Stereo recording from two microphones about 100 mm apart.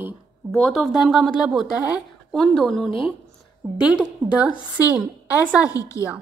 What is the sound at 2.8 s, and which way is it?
Speech, 60° left (ahead or behind).